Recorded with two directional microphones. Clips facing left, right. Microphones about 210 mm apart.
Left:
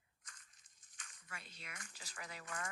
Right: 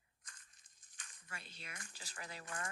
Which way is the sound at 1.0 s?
30° right (ahead or behind).